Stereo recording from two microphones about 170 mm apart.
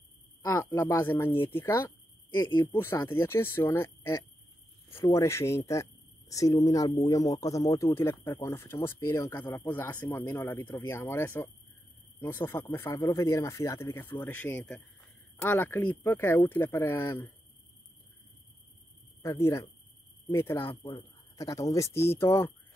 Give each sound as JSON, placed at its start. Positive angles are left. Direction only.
{"t": 0.4, "sound": "speech", "side_deg": 15}
{"t": 19.2, "sound": "speech", "side_deg": 15}